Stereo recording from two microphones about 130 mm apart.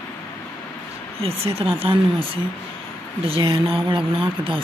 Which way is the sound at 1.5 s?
45° right (ahead or behind).